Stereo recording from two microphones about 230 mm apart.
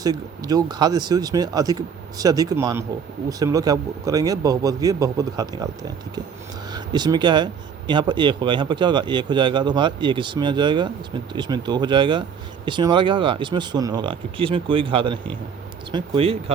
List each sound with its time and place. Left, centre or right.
0.0 s speech: centre
6.7 s speech: centre